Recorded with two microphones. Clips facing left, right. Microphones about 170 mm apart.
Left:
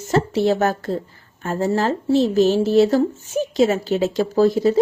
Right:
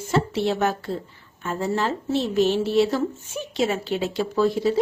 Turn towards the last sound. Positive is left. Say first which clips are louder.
# left 5 dB
turn(degrees=40)  # may be behind; listen again after turning